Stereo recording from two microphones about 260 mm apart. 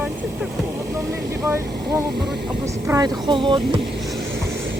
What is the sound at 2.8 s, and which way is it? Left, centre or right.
Speech, centre.